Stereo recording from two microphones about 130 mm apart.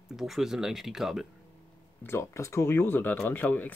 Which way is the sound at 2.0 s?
20° left (ahead or behind).